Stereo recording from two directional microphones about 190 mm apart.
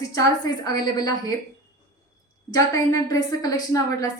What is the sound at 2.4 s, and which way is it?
A woman's voice, 20° left (ahead or behind).